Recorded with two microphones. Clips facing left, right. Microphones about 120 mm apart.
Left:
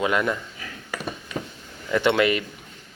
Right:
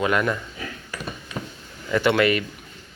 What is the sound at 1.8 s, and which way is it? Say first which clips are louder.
Speech: right 1 dB; centre (ahead or behind).